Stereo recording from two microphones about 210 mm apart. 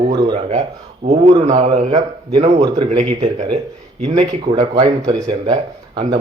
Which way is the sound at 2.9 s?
30° right (ahead or behind).